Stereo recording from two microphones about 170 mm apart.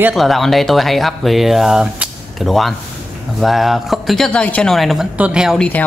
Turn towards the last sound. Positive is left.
turn(degrees=-5)  # may be behind; listen again after turning